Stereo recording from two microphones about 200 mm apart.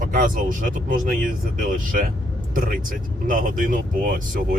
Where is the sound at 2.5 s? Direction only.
45° right (ahead or behind).